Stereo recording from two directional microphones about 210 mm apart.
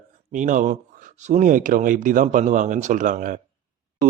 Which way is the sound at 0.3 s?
35° right (ahead or behind).